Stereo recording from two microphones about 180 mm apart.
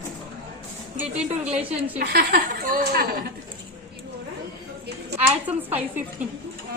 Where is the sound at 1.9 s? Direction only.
60° right (ahead or behind).